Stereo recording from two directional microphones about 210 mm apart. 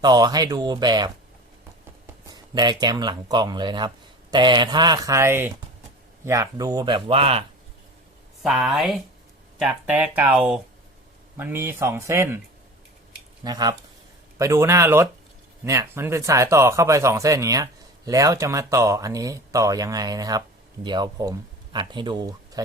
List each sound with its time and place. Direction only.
0.0 s speech: 20° right (ahead or behind)
2.2 s speech: 20° right (ahead or behind)
8.4 s speech: centre (ahead or behind)
13.4 s speech: 20° right (ahead or behind)